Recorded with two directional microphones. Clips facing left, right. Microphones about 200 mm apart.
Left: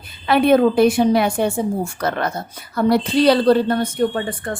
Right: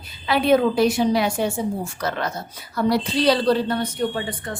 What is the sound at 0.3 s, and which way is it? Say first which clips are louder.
A woman's voice: left 4 dB; 55° left (ahead or behind).